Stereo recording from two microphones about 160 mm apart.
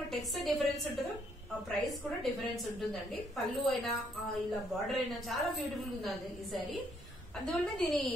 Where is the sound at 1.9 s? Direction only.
Centre (ahead or behind).